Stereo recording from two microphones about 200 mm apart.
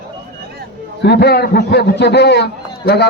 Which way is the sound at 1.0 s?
55° left (ahead or behind).